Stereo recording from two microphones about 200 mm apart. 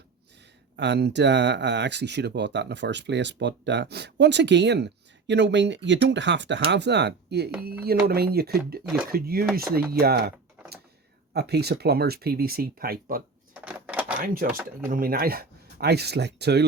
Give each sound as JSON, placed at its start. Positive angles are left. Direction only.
{"t": 0.8, "sound": "speech", "side_deg": -60}
{"t": 13.5, "sound": "a sound", "side_deg": -5}
{"t": 14.4, "sound": "speech", "side_deg": -10}
{"t": 14.8, "sound": "speech", "side_deg": -45}